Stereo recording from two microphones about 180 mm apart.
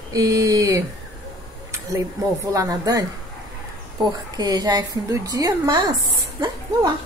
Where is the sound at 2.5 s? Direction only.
20° right (ahead or behind).